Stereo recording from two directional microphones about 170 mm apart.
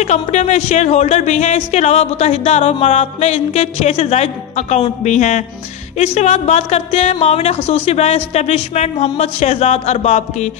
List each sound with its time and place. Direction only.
0.0 s speech: 45° left (ahead or behind)